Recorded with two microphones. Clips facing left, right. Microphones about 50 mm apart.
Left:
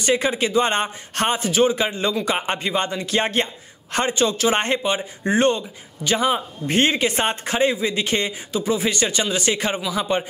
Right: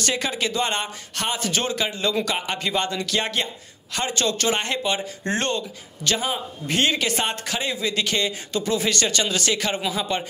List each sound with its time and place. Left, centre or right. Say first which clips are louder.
0.0 s speech: left 5 dB; left
1.5 s speech: left 7 dB; centre
1.8 s speech: left 2 dB; left
4.1 s speech: left 3 dB; centre
6.1 s speech: left 7 dB; left
6.7 s speech: left 3 dB; left
8.5 s speech: left 2 dB; centre